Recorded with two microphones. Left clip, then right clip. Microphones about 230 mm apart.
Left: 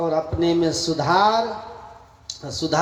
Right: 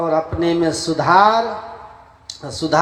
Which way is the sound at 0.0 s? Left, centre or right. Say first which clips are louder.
Right 3 dB; right.